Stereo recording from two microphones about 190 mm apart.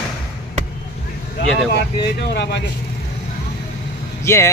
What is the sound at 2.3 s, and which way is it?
Speech, 65° left (ahead or behind).